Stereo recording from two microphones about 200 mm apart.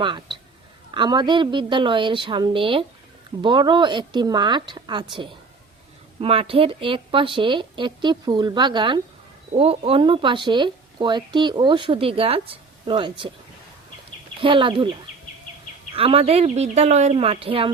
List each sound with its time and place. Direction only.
0.0 s speech: 25° right (ahead or behind)
6.1 s speech: 30° right (ahead or behind)
14.4 s speech: 25° right (ahead or behind)
16.0 s speech: 30° right (ahead or behind)